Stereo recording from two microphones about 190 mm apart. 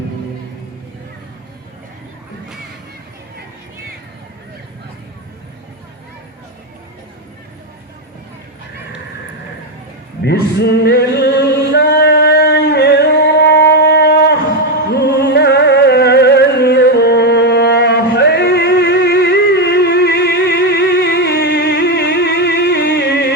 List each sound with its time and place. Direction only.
10.2 s male singing: 60° left (ahead or behind)
14.9 s music: 60° left (ahead or behind)